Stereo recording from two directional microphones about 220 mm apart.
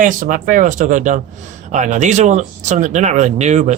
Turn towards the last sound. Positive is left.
turn(degrees=-30)  # may be behind; listen again after turning